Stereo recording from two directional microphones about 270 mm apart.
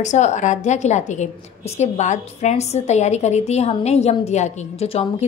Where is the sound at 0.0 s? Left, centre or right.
Left.